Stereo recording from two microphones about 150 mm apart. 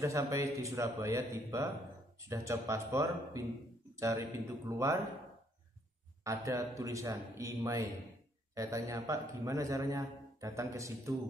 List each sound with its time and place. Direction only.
0.0 s a man's voice: 20° right (ahead or behind)
6.2 s a man's voice: 20° right (ahead or behind)